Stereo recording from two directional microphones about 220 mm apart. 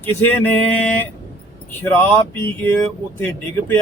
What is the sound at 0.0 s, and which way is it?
Speech, 10° left (ahead or behind).